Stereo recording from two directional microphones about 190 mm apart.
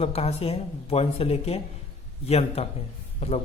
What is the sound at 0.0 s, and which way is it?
A man's voice, 30° left (ahead or behind).